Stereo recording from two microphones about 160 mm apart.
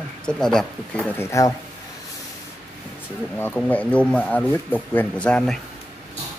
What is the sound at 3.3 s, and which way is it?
Speech, 10° left (ahead or behind).